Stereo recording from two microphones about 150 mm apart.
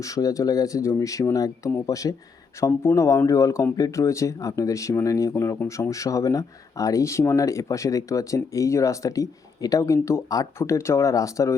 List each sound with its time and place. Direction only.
0.0 s speech: 20° left (ahead or behind)